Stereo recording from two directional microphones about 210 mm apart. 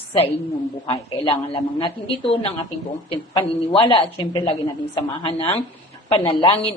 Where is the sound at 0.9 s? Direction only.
20° left (ahead or behind).